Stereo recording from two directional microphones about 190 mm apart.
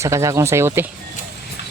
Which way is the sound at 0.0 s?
15° right (ahead or behind).